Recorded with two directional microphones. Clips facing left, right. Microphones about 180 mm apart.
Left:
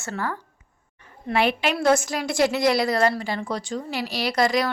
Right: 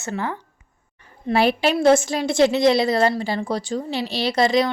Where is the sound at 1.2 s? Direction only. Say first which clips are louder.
Right 4 dB; 35° right (ahead or behind).